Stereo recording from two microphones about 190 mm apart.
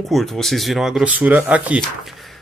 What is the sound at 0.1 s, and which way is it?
A man's voice, centre (ahead or behind).